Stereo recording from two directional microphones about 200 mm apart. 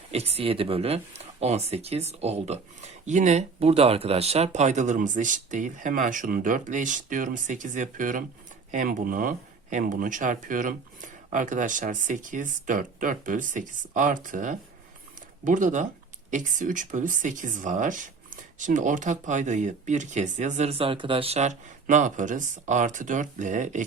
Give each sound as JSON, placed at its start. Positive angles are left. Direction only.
{"t": 0.1, "sound": "speech", "side_deg": -30}